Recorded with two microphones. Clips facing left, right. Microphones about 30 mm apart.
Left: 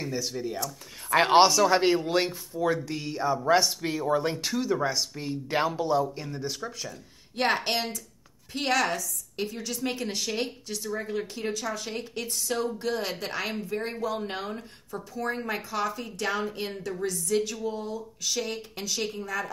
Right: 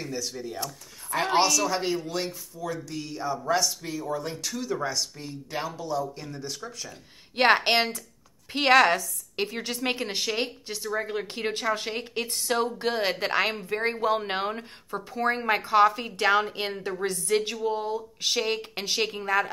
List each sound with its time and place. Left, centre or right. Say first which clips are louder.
0.1 s speech: left 2 dB; centre
1.1 s a man's voice: left 4 dB; left
4.6 s speech: left 1 dB; centre
6.0 s speech: left 2 dB; centre
7.3 s a woman's voice: right 6 dB; right
10.0 s speech: right 2 dB; right
11.3 s a woman's voice: right 4 dB; right
16.7 s speech: right 2 dB; right
17.0 s a woman's voice: right 1 dB; right
18.2 s a woman's voice: right 4 dB; right